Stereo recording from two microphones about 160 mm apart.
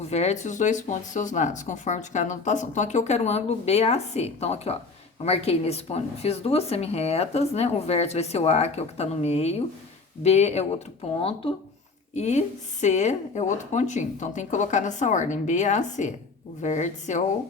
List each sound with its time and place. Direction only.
0.0 s speech: 45° left (ahead or behind)